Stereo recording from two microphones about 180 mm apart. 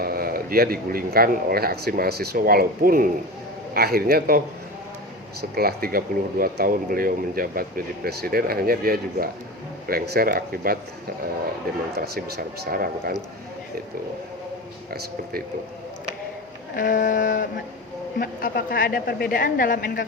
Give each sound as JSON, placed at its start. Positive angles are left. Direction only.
{"t": 0.0, "sound": "speech", "side_deg": -55}
{"t": 5.4, "sound": "speech", "side_deg": -55}
{"t": 11.9, "sound": "speech", "side_deg": -60}
{"t": 14.8, "sound": "speech", "side_deg": -55}
{"t": 16.7, "sound": "a woman's voice", "side_deg": 50}